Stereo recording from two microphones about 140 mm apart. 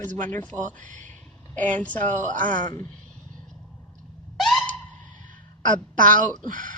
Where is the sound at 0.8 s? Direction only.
65° right (ahead or behind).